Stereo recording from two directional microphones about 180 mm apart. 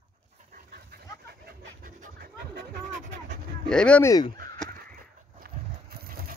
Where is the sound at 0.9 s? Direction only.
60° right (ahead or behind).